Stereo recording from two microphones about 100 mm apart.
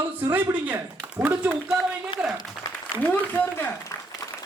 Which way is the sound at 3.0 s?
20° left (ahead or behind).